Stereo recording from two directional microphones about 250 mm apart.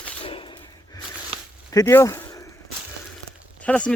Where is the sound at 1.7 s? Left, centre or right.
Centre.